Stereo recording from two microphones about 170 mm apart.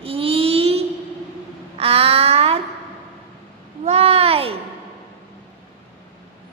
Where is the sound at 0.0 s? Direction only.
35° right (ahead or behind).